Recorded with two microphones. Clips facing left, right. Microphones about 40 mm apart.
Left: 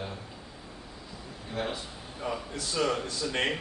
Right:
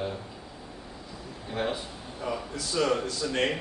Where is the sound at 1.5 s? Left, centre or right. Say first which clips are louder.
Right 3 dB; centre.